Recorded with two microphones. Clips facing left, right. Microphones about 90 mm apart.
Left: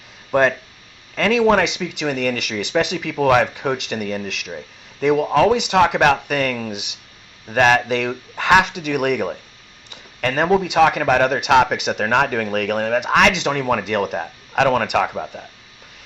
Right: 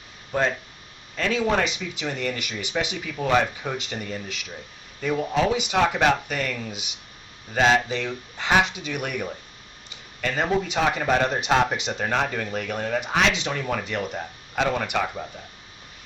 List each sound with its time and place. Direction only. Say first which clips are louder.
0.3 s speech: left 8 dB; 60° left (ahead or behind)